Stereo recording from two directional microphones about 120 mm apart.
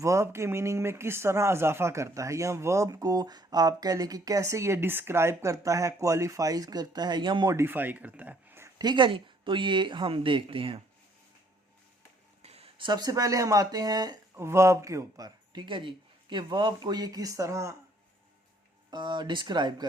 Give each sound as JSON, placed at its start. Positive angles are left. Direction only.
{"t": 0.0, "sound": "speech", "side_deg": -25}
{"t": 7.5, "sound": "speech", "side_deg": -20}
{"t": 8.8, "sound": "speech", "side_deg": -40}
{"t": 12.4, "sound": "speech", "side_deg": -60}
{"t": 18.9, "sound": "speech", "side_deg": -40}